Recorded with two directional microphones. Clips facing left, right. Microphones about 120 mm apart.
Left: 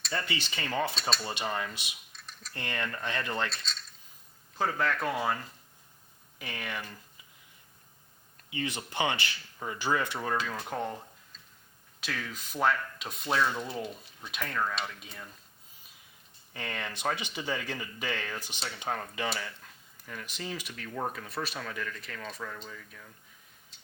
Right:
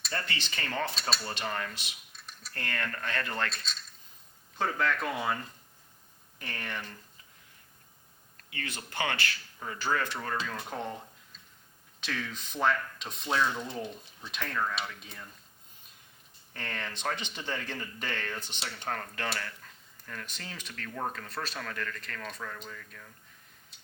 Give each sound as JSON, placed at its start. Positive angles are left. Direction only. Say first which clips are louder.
{"t": 0.1, "sound": "speech", "louder": "left 2 dB", "side_deg": 10}
{"t": 4.5, "sound": "speech", "louder": "even", "side_deg": 10}
{"t": 8.4, "sound": "speech", "louder": "left 6 dB", "side_deg": 20}
{"t": 13.3, "sound": "speech", "louder": "left 1 dB", "side_deg": 15}
{"t": 16.5, "sound": "speech", "louder": "left 1 dB", "side_deg": 10}